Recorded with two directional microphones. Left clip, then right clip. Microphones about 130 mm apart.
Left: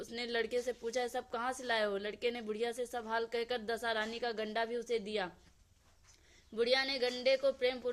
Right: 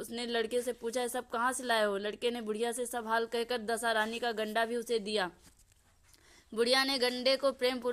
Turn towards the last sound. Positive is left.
turn(degrees=-50)  # may be behind; listen again after turning